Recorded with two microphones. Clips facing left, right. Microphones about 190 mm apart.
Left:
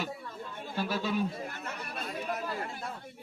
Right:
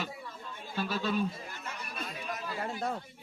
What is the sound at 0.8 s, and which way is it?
Speech, 10° left (ahead or behind).